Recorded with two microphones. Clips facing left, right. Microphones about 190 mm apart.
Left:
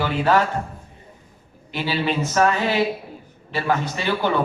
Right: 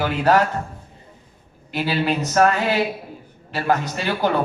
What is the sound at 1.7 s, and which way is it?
Speech, 45° right (ahead or behind).